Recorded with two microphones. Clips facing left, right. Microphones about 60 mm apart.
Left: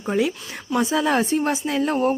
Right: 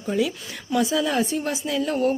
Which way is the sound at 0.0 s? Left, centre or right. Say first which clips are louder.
Left 2 dB; left.